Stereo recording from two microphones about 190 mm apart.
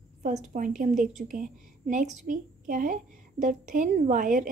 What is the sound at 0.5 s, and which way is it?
A woman's voice, 45° right (ahead or behind).